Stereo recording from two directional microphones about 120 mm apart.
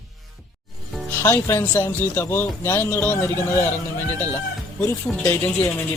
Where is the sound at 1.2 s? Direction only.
20° left (ahead or behind).